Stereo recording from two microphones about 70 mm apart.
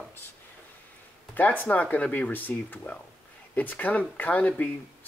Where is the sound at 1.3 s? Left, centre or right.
Left.